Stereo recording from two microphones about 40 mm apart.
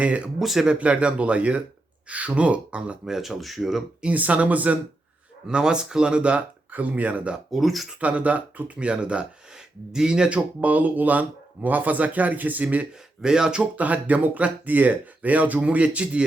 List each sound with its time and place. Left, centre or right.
0.0 s speech: right
0.3 s speech: centre
0.8 s speech: right
3.1 s speech: centre
4.0 s speech: right
5.5 s speech: right
6.7 s speech: right
7.5 s speech: centre
7.9 s speech: right
10.3 s speech: right
13.2 s speech: centre
13.6 s speech: right